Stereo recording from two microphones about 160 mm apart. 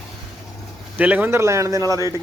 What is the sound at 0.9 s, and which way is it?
A man's voice, 10° right (ahead or behind).